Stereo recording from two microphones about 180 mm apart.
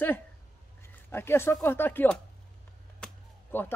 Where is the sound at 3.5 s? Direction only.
10° left (ahead or behind).